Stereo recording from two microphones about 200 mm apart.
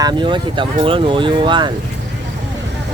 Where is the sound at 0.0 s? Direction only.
20° right (ahead or behind).